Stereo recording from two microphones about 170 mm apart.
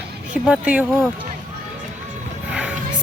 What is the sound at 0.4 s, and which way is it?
Speech, 10° right (ahead or behind).